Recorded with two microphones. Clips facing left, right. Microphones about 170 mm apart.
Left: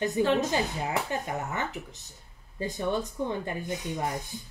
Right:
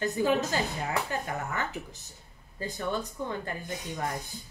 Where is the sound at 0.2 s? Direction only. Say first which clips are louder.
Left 2 dB; 5° right (ahead or behind).